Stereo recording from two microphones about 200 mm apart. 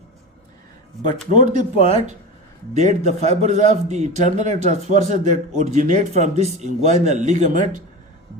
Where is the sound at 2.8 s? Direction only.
35° right (ahead or behind).